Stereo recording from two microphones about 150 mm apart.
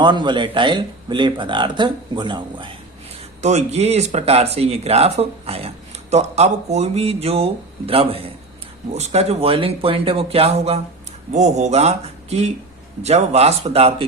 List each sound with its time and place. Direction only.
0.0 s speech: 30° right (ahead or behind)
3.4 s speech: 45° right (ahead or behind)